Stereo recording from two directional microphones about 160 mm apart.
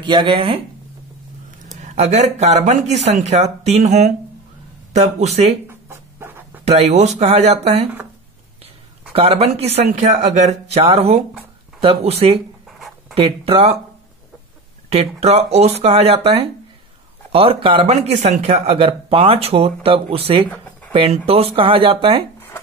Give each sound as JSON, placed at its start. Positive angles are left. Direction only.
{"t": 0.0, "sound": "speech", "side_deg": -30}
{"t": 1.8, "sound": "speech", "side_deg": -45}
{"t": 5.7, "sound": "dog", "side_deg": -15}
{"t": 6.6, "sound": "speech", "side_deg": -40}
{"t": 9.1, "sound": "speech", "side_deg": -40}
{"t": 12.6, "sound": "a sound", "side_deg": 0}
{"t": 13.1, "sound": "speech", "side_deg": -35}
{"t": 14.9, "sound": "speech", "side_deg": -40}